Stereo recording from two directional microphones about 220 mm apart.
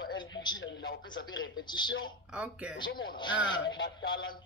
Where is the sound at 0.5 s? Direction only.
55° left (ahead or behind).